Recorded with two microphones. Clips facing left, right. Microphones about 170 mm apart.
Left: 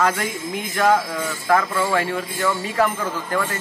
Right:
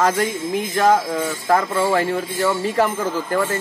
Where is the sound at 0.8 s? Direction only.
25° right (ahead or behind).